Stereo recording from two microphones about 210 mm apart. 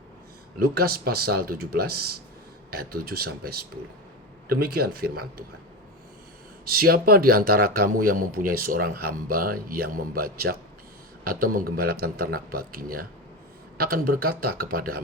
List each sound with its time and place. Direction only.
0.6 s speech: 45° right (ahead or behind)
6.7 s speech: 45° right (ahead or behind)